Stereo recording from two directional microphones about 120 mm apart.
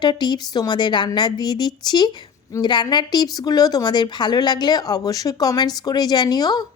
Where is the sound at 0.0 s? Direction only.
40° left (ahead or behind).